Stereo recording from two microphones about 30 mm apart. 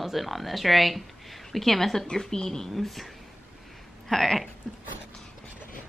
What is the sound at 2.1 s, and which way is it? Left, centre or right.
Speech, left.